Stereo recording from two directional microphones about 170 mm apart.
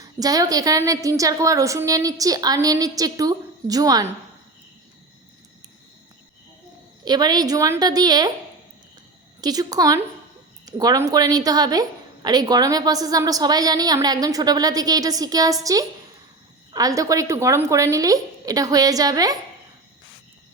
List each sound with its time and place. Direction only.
0.0 s a woman's voice: 20° right (ahead or behind)
7.0 s a woman's voice: 25° right (ahead or behind)
9.4 s a woman's voice: 20° right (ahead or behind)